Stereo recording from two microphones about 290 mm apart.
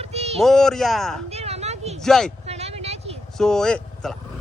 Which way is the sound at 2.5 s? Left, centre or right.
Right.